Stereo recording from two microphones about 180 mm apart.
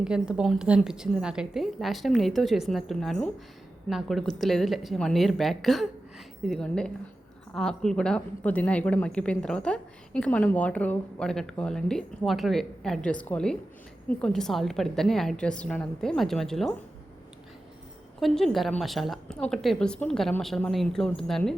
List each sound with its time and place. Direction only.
0.0 s speech: 5° right (ahead or behind)
18.2 s speech: centre (ahead or behind)